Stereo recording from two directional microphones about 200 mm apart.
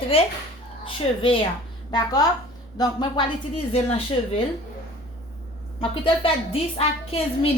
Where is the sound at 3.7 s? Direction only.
30° left (ahead or behind).